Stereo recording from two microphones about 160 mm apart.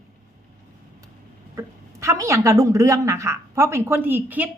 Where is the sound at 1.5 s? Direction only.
20° right (ahead or behind).